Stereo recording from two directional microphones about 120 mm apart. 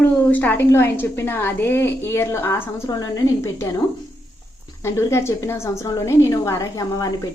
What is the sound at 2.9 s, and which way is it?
Speech, 30° left (ahead or behind).